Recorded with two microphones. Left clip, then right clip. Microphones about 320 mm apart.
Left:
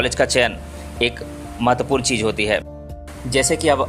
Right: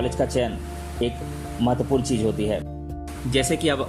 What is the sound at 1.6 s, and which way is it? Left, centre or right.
Speech, left.